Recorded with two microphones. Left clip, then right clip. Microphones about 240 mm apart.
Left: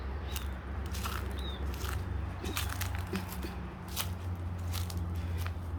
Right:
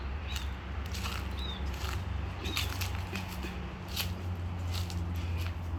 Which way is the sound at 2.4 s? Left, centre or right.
Centre.